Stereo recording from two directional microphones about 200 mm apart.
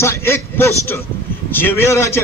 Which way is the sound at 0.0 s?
15° left (ahead or behind).